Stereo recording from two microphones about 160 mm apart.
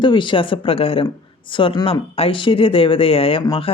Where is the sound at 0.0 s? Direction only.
30° left (ahead or behind).